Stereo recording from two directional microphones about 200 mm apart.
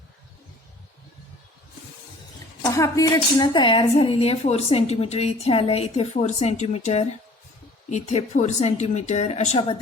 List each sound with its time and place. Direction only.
2.6 s speech: 15° left (ahead or behind)